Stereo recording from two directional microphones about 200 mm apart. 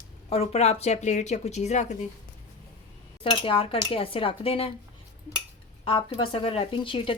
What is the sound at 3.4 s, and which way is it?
Speech, 25° left (ahead or behind).